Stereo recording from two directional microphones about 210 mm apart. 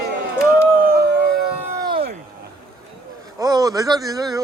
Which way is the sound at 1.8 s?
25° right (ahead or behind).